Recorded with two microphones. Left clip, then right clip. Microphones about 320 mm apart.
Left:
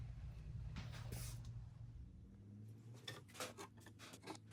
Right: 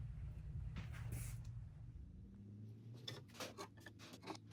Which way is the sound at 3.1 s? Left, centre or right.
Centre.